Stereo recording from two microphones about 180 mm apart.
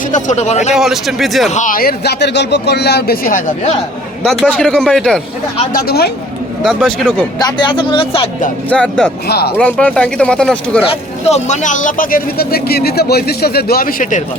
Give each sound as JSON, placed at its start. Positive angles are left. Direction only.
{"t": 0.1, "sound": "a man's voice", "side_deg": 40}
{"t": 0.8, "sound": "speech", "side_deg": 0}
{"t": 1.5, "sound": "speech", "side_deg": 45}
{"t": 4.2, "sound": "speech", "side_deg": 0}
{"t": 5.7, "sound": "speech", "side_deg": 60}
{"t": 6.6, "sound": "speech", "side_deg": 0}
{"t": 7.3, "sound": "speech", "side_deg": 25}
{"t": 8.7, "sound": "speech", "side_deg": 5}
{"t": 9.2, "sound": "speech", "side_deg": 60}
{"t": 9.6, "sound": "speech", "side_deg": 5}
{"t": 11.3, "sound": "speech", "side_deg": 40}